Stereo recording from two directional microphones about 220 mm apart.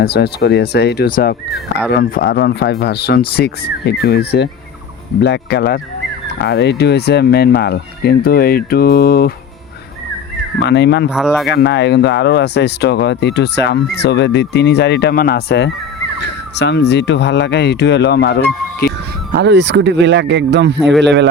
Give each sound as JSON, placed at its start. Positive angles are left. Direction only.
{"t": 0.0, "sound": "speech", "side_deg": 45}
{"t": 10.6, "sound": "speech", "side_deg": 50}
{"t": 11.1, "sound": "speech", "side_deg": 0}
{"t": 11.5, "sound": "speech", "side_deg": 50}
{"t": 19.3, "sound": "speech", "side_deg": -50}